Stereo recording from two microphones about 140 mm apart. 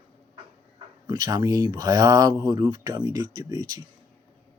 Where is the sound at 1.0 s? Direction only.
25° right (ahead or behind).